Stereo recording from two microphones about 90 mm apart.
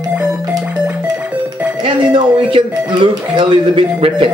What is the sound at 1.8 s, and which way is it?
Speech, 70° right (ahead or behind).